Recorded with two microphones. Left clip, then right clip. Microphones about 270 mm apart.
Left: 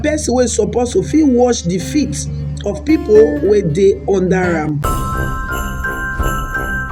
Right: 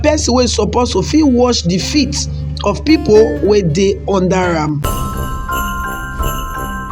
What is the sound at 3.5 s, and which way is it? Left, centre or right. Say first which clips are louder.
Speech: left 1 dB; right.